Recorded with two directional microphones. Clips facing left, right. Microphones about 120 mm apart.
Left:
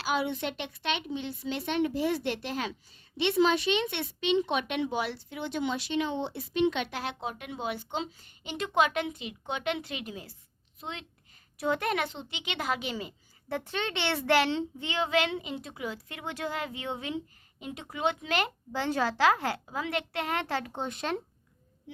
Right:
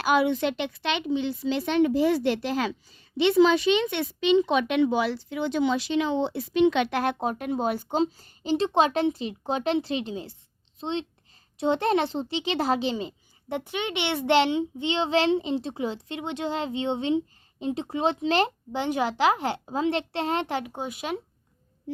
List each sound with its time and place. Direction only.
0.0 s speech: 70° right (ahead or behind); by 2.7 s 90° right
4.7 s speech: 90° right
7.0 s a woman's voice: 50° right (ahead or behind); by 18.8 s 30° right (ahead or behind)
18.8 s a child's voice: 15° right (ahead or behind)